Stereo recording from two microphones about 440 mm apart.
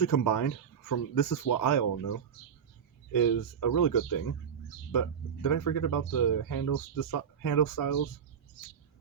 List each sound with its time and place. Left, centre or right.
0.0 s speech: left